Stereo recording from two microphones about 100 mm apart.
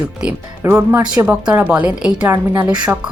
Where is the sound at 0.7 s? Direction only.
20° right (ahead or behind).